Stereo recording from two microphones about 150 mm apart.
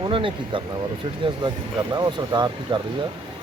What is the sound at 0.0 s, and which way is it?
Speech, 35° right (ahead or behind).